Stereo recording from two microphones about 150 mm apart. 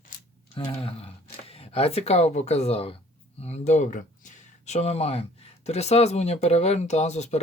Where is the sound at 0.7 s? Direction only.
40° left (ahead or behind).